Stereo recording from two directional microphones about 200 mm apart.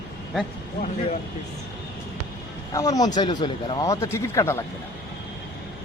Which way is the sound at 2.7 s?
15° left (ahead or behind).